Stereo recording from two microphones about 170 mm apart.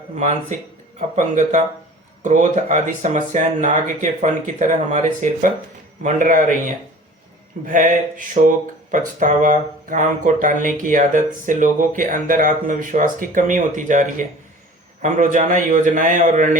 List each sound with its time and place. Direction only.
0.9 s speech: 45° right (ahead or behind)
7.6 s speech: 50° right (ahead or behind)